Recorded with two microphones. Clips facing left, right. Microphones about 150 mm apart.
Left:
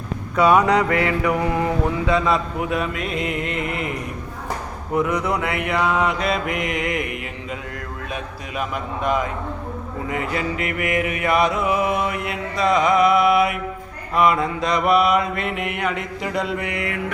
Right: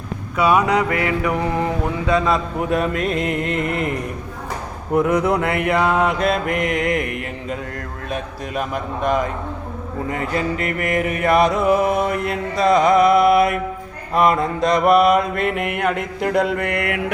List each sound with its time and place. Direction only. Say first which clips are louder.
0.3 s a sound: left 1 dB; 5° right (ahead or behind)
0.9 s mantra: even; 25° left (ahead or behind)
1.5 s speech: even; 20° right (ahead or behind)
2.3 s music: right 2 dB; 40° right (ahead or behind)
3.0 s carnatic music: right 4 dB; 5° left (ahead or behind)
5.4 s mantra: right 4 dB; 50° right (ahead or behind)
8.1 s music: right 6 dB; 40° right (ahead or behind)
14.1 s mantra: right 2 dB; 40° right (ahead or behind); by 17.0 s 65° right (ahead or behind)